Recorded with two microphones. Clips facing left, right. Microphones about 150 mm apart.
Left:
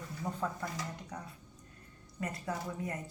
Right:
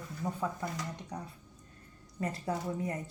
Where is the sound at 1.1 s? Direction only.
25° right (ahead or behind).